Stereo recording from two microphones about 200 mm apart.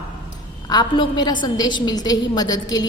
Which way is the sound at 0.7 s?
20° left (ahead or behind).